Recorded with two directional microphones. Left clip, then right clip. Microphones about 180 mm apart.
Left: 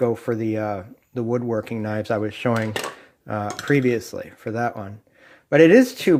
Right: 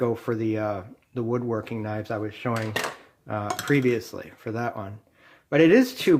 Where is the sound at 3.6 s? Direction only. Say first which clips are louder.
Left 3 dB; 20° left (ahead or behind).